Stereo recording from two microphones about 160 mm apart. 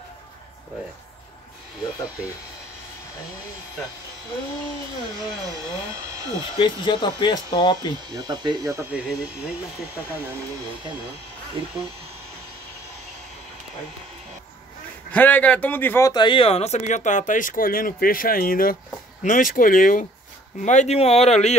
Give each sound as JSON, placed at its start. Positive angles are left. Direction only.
{"t": 6.0, "sound": "speech", "side_deg": -20}
{"t": 6.6, "sound": "speech", "side_deg": 30}
{"t": 8.1, "sound": "speech", "side_deg": -25}
{"t": 8.7, "sound": "speech", "side_deg": -5}
{"t": 15.0, "sound": "a man's voice", "side_deg": 10}
{"t": 16.1, "sound": "speech", "side_deg": 30}
{"t": 20.6, "sound": "speech", "side_deg": 45}